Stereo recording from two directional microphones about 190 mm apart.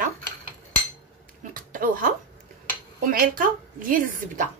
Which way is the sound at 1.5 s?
45° right (ahead or behind).